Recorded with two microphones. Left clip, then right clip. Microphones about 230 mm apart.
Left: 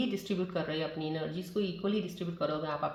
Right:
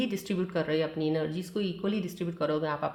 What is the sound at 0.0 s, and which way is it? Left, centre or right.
Speech, right.